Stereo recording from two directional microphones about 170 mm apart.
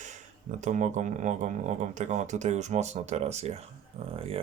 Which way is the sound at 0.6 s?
45° right (ahead or behind).